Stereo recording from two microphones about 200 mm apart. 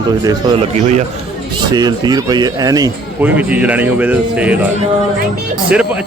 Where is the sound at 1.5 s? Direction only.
20° right (ahead or behind).